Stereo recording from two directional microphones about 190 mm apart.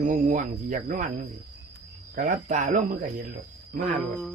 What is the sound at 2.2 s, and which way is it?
Speech, 40° right (ahead or behind).